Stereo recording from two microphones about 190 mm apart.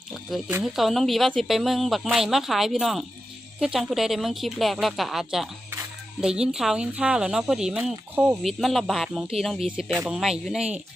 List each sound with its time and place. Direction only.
0.1 s cricket: centre (ahead or behind)
0.6 s speech: centre (ahead or behind)